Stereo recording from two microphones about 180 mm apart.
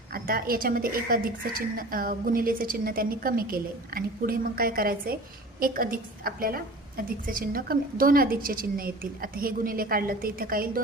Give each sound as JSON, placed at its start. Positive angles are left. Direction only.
{"t": 0.1, "sound": "a woman's voice", "side_deg": -55}